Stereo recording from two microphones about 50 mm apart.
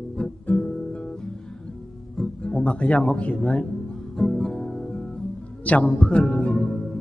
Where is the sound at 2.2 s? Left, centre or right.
Centre.